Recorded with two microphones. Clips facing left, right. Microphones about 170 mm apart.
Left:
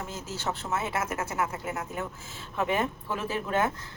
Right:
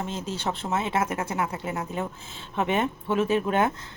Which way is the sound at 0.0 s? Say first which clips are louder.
Right 4 dB; 25° right (ahead or behind).